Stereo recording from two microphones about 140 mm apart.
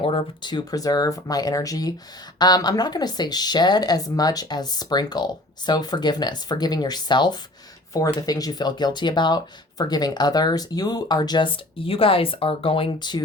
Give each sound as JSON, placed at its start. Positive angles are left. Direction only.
{"t": 0.0, "sound": "speech", "side_deg": 40}